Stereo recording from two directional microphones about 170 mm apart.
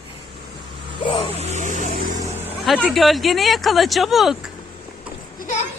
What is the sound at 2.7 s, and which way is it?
Speech, centre (ahead or behind).